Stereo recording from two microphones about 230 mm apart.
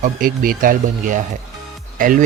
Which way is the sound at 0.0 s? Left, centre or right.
Right.